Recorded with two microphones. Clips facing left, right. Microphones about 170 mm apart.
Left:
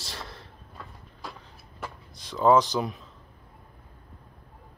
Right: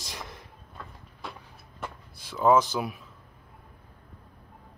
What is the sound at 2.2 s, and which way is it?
Speech, 10° right (ahead or behind).